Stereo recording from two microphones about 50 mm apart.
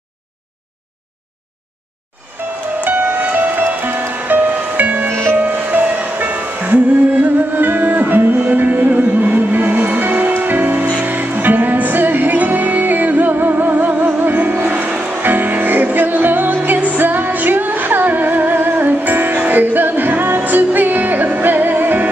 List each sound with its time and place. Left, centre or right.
2.4 s music: right
2.8 s music: right
5.9 s music: right
15.2 s music: right